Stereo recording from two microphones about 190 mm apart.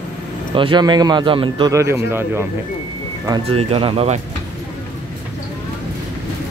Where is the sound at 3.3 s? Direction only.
30° right (ahead or behind).